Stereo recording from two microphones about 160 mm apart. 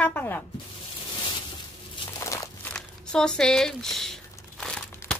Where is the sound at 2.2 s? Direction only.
20° left (ahead or behind).